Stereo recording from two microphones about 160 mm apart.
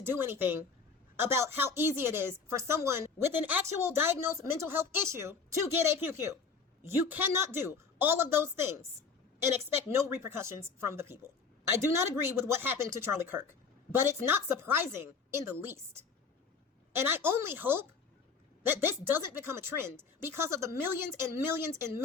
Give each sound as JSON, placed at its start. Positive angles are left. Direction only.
{"t": 0.0, "sound": "a woman's voice", "side_deg": -15}